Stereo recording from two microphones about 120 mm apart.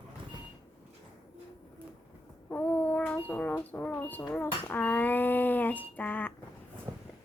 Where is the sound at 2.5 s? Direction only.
15° left (ahead or behind).